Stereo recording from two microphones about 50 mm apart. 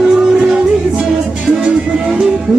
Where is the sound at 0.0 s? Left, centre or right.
Centre.